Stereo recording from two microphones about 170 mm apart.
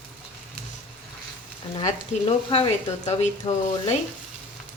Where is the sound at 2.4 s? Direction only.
35° left (ahead or behind).